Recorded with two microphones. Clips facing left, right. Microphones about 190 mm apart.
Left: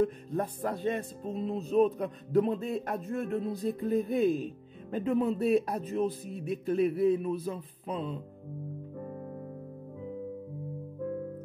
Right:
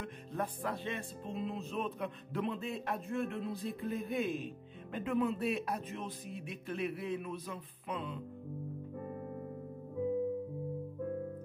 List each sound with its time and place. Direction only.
0.0 s music: 40° left (ahead or behind)